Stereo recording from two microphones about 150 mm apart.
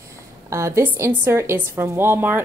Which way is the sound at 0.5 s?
20° right (ahead or behind).